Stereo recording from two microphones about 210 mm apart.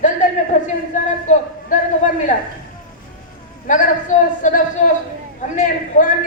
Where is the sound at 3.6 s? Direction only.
35° left (ahead or behind).